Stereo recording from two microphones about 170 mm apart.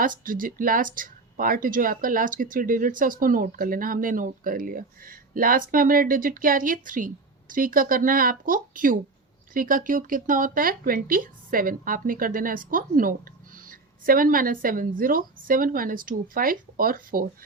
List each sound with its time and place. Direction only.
0.0 s speech: 55° right (ahead or behind)